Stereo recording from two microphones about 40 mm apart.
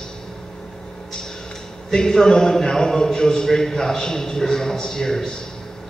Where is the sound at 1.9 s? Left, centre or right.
Centre.